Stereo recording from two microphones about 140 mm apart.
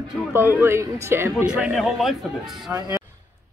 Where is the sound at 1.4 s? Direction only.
5° right (ahead or behind).